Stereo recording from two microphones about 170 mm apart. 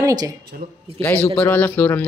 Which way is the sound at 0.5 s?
55° right (ahead or behind).